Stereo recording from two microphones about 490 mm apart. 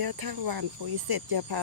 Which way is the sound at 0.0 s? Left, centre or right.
Right.